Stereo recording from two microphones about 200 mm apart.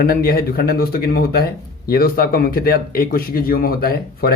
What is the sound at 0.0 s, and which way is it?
A man's voice, 50° left (ahead or behind).